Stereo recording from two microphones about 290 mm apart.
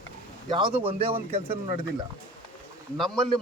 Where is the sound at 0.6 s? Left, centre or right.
Centre.